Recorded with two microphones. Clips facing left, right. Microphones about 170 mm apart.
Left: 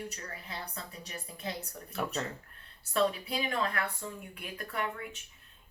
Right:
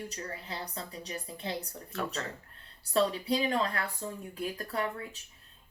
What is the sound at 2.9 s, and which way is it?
Speech, 30° right (ahead or behind).